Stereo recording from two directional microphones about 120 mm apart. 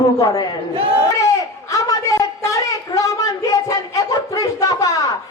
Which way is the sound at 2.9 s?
30° left (ahead or behind).